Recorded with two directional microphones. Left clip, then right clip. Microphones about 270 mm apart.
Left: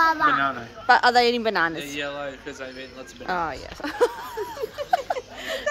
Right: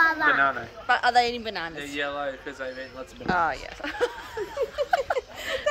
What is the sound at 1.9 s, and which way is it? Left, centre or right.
Speech, centre.